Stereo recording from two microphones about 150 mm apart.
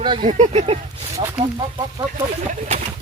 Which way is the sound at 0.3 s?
50° right (ahead or behind).